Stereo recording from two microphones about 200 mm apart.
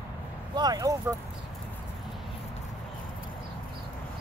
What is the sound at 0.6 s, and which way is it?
Speech, 20° right (ahead or behind).